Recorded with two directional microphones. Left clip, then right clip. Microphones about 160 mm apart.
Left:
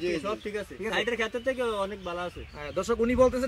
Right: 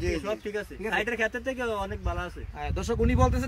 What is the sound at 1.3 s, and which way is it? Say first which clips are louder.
Speech: left 2 dB; 25° right (ahead or behind).